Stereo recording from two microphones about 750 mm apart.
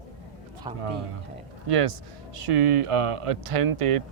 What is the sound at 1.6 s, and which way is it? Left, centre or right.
Speech, right.